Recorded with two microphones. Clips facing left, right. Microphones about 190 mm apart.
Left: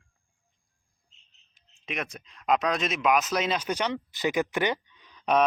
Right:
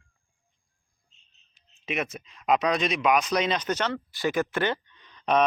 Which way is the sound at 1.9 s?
5° right (ahead or behind).